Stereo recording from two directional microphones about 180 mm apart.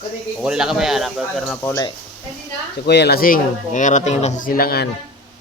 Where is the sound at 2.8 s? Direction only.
65° left (ahead or behind).